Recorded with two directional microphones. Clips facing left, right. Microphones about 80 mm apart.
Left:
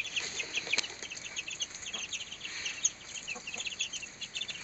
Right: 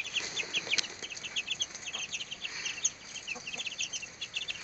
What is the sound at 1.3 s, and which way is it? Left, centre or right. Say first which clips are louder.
Chicken: right 6 dB; right.